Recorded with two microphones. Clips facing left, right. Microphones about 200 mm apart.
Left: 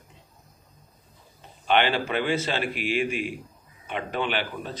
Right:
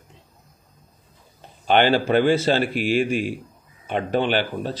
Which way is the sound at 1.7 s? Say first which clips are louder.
Right 6 dB; 40° right (ahead or behind).